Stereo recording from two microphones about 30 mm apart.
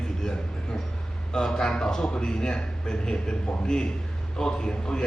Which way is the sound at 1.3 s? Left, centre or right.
Centre.